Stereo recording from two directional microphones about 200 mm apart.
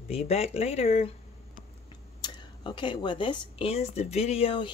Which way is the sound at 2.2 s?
25° left (ahead or behind).